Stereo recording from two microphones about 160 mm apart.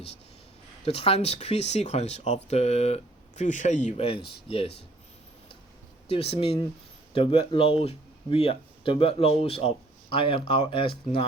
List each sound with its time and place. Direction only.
0.9 s speech: 40° left (ahead or behind)
6.1 s speech: 35° left (ahead or behind)